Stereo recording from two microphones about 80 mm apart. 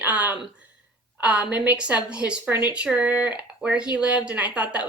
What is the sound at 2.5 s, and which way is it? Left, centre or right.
Speech, right.